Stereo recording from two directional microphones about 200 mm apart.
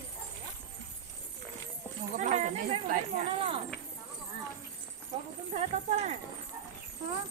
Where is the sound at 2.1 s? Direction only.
35° right (ahead or behind).